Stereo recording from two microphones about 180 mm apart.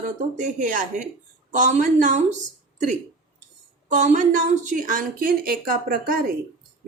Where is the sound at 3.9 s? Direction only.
45° right (ahead or behind).